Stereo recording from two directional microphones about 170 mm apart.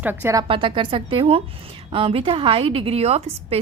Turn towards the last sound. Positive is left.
turn(degrees=-40)  # may be behind; listen again after turning